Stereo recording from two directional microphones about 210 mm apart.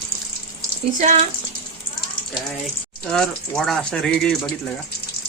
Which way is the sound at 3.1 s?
5° left (ahead or behind).